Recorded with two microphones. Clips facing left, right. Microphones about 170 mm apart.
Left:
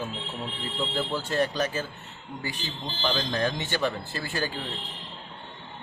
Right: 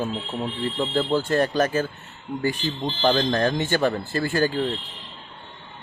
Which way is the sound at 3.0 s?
50° right (ahead or behind).